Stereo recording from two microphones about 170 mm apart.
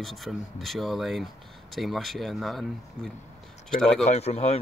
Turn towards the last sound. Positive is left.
turn(degrees=40)  # may be behind; listen again after turning